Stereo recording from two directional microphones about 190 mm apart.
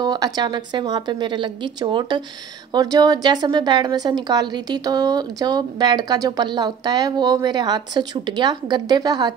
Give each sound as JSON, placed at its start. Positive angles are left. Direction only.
{"t": 0.0, "sound": "a woman's voice", "side_deg": -20}